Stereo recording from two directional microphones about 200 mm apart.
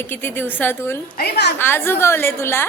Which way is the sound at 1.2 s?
55° left (ahead or behind).